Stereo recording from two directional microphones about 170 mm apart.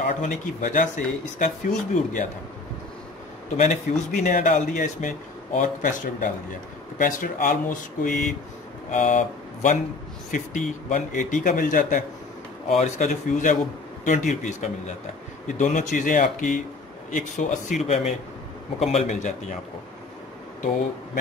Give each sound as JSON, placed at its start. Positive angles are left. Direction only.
{"t": 0.0, "sound": "speech", "side_deg": 50}
{"t": 3.5, "sound": "speech", "side_deg": 45}